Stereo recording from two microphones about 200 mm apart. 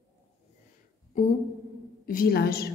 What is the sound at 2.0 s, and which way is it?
Speech, 45° left (ahead or behind).